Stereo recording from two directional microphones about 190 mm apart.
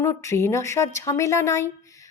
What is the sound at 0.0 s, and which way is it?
A woman's voice, 15° left (ahead or behind).